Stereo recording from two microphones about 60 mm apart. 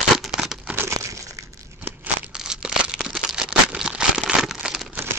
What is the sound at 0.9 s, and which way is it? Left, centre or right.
Crumpling, right.